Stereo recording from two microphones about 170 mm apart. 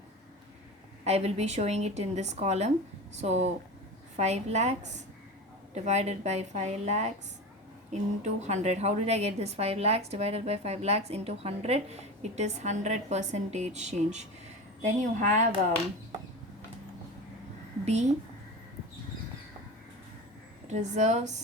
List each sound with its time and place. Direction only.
1.0 s a woman's voice: 40° right (ahead or behind)
20.7 s a woman's voice: 40° right (ahead or behind)